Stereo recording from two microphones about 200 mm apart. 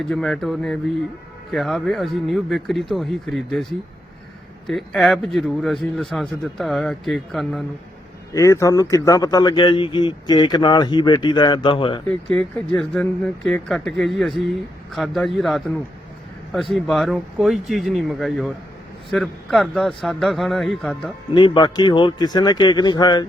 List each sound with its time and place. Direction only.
0.0 s a man's voice: centre (ahead or behind)
8.3 s speech: 15° left (ahead or behind)
12.5 s a man's voice: 5° left (ahead or behind)
21.3 s speech: 25° left (ahead or behind)